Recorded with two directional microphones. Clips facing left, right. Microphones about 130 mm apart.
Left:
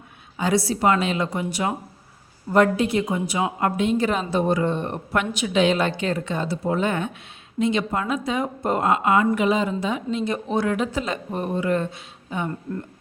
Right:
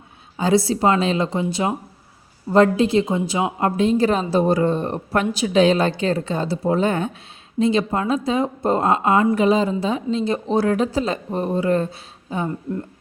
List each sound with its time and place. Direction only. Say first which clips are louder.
0.3 s a woman's voice: right 4 dB; 25° right (ahead or behind)